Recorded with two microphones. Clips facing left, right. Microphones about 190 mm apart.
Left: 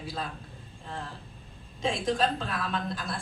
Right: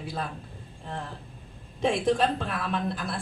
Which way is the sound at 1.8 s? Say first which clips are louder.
Right 4 dB; 65° right (ahead or behind).